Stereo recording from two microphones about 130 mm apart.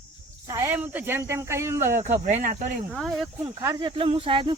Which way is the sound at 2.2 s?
75° right (ahead or behind).